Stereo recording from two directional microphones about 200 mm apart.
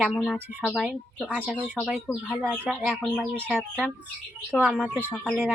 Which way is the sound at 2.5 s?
10° right (ahead or behind).